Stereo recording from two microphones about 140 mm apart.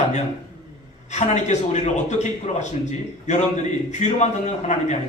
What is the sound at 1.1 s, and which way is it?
Speech, 55° left (ahead or behind).